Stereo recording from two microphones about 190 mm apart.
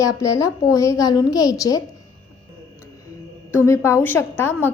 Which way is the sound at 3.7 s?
15° left (ahead or behind).